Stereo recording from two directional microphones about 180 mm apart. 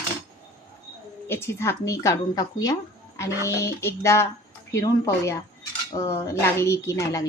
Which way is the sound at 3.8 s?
15° left (ahead or behind).